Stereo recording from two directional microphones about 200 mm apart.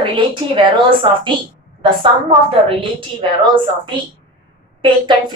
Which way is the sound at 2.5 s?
25° right (ahead or behind).